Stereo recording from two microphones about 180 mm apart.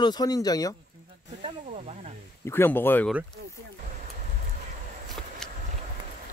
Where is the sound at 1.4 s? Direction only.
35° right (ahead or behind).